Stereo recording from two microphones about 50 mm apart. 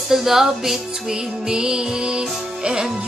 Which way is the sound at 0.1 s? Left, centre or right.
Centre.